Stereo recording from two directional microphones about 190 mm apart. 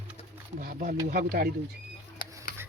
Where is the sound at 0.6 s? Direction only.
50° right (ahead or behind).